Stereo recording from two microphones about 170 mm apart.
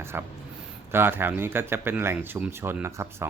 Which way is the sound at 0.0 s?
15° right (ahead or behind).